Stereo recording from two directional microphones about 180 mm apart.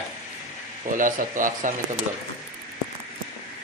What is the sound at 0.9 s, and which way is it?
Speech, 45° right (ahead or behind).